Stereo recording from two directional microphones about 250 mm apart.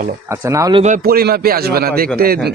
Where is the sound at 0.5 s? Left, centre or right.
Centre.